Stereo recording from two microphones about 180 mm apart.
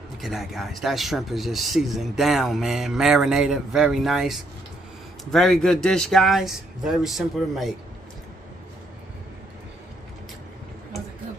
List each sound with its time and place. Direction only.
0.2 s speech: centre (ahead or behind)